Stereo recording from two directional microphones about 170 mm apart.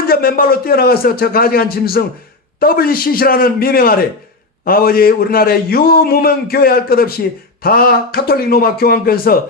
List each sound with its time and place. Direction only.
0.1 s a man's voice: 60° left (ahead or behind)